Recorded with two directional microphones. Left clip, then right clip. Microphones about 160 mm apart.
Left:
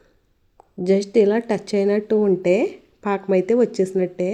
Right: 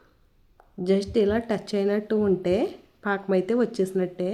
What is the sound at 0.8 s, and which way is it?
Speech, 20° left (ahead or behind).